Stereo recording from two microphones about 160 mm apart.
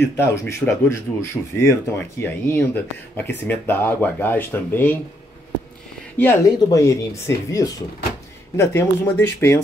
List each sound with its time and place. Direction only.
0.2 s speech: 15° left (ahead or behind)
6.1 s speech: 15° left (ahead or behind)